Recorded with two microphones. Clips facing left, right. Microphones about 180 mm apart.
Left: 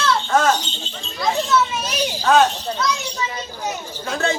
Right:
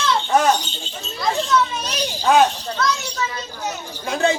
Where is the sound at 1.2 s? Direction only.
5° left (ahead or behind).